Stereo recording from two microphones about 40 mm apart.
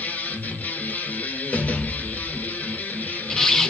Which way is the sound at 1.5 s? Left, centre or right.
Left.